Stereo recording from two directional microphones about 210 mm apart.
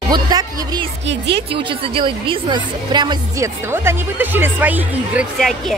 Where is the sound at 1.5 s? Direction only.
25° right (ahead or behind).